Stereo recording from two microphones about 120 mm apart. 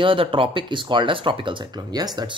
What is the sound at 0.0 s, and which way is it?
Speech, 45° right (ahead or behind).